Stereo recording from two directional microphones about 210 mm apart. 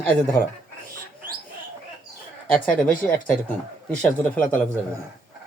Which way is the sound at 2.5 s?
5° left (ahead or behind).